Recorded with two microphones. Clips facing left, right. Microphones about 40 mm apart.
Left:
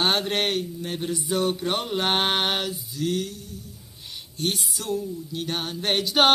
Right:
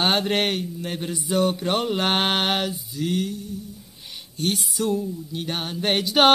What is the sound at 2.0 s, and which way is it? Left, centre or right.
Mantra, right.